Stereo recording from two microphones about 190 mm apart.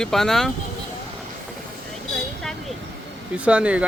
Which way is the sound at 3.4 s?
5° right (ahead or behind).